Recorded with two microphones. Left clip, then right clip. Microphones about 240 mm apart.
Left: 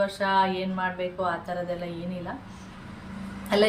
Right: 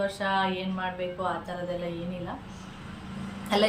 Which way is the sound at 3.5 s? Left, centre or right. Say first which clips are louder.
Left 2 dB; centre.